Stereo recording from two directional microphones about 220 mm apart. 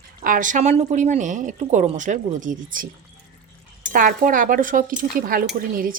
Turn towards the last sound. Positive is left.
turn(degrees=-40)  # may be behind; listen again after turning